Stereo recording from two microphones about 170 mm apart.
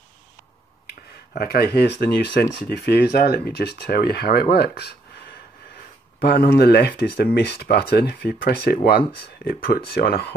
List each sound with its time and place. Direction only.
1.3 s speech: 65° left (ahead or behind)
6.2 s speech: 70° left (ahead or behind)